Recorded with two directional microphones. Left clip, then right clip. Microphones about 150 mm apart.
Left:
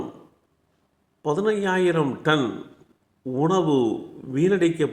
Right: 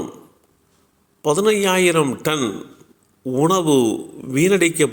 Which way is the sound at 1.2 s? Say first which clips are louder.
Right 6 dB; 20° right (ahead or behind).